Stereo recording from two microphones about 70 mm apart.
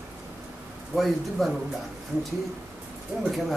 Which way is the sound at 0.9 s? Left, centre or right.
Centre.